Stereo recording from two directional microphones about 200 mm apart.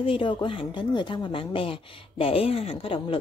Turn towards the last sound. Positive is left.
turn(degrees=25)  # may be behind; listen again after turning